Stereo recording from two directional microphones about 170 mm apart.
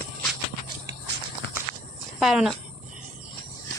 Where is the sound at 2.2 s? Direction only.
Centre (ahead or behind).